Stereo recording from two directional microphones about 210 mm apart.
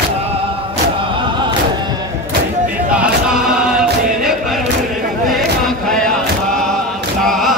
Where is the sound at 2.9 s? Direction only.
5° right (ahead or behind).